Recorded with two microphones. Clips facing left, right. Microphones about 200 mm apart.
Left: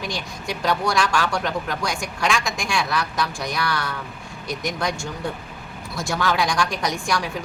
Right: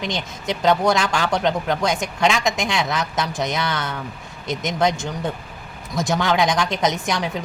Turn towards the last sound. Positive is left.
turn(degrees=-20)  # may be behind; listen again after turning